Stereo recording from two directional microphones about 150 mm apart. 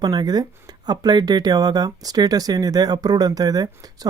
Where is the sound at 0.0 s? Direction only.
30° right (ahead or behind).